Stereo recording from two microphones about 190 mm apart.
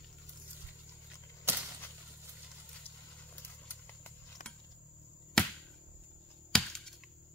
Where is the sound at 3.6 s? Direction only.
10° left (ahead or behind).